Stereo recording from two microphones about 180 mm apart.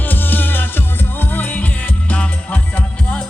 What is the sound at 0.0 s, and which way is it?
Music, 10° left (ahead or behind).